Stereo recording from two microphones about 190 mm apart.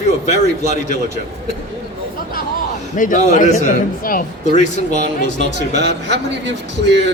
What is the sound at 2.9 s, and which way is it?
A man's voice, 45° left (ahead or behind).